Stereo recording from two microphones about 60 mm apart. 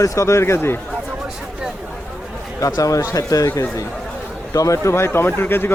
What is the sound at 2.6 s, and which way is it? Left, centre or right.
Speech, left.